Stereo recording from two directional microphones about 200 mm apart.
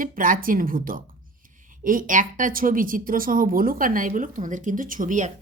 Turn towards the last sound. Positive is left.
turn(degrees=-40)  # may be behind; listen again after turning